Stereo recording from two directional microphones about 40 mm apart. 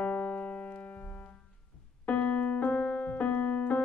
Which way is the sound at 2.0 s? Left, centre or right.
Left.